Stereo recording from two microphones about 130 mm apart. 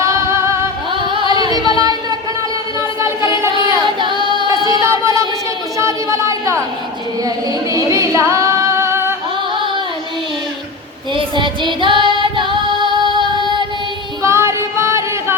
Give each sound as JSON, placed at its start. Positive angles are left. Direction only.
{"t": 0.0, "sound": "music", "side_deg": -25}
{"t": 0.9, "sound": "music", "side_deg": -40}
{"t": 1.3, "sound": "a sound", "side_deg": -30}
{"t": 3.8, "sound": "music", "side_deg": -40}
{"t": 5.7, "sound": "a sound", "side_deg": -20}
{"t": 7.3, "sound": "singing", "side_deg": -25}
{"t": 11.1, "sound": "female singing", "side_deg": -40}
{"t": 14.2, "sound": "music", "side_deg": -20}